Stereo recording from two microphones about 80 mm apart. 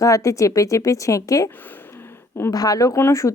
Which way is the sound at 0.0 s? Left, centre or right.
Left.